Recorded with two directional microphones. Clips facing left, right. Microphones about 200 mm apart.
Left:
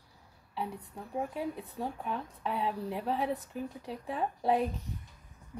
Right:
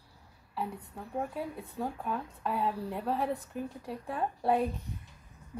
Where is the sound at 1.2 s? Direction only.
Centre (ahead or behind).